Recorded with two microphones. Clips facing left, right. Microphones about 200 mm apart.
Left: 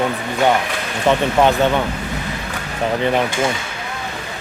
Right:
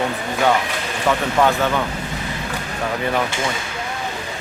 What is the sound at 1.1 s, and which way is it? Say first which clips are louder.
Speech: left 3 dB; 20° left (ahead or behind).